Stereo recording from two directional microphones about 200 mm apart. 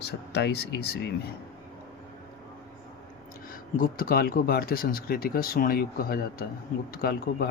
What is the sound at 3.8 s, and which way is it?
Speech, 45° left (ahead or behind).